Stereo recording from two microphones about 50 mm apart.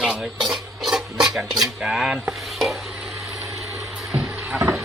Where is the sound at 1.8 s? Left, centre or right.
Centre.